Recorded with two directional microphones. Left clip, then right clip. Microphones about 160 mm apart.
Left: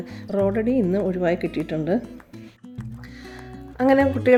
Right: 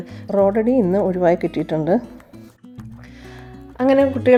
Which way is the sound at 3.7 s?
10° right (ahead or behind).